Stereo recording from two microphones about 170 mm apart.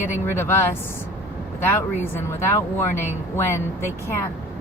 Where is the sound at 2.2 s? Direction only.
15° left (ahead or behind).